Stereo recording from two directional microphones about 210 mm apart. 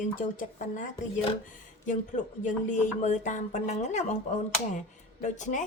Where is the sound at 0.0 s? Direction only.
40° left (ahead or behind).